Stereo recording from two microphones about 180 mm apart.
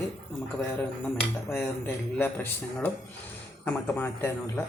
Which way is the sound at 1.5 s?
15° left (ahead or behind).